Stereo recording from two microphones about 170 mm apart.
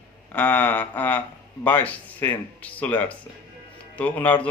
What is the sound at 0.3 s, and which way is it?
A man's voice, 10° left (ahead or behind).